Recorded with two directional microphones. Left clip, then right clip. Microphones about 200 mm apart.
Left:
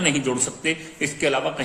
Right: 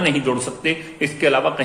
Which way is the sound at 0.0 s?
25° left (ahead or behind).